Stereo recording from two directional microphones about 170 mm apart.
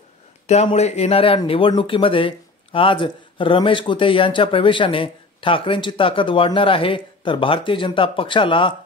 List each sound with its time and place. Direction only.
0.5 s speech: 40° left (ahead or behind)